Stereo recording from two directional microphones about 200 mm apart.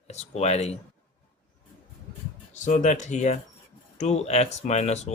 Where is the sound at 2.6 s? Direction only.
40° left (ahead or behind).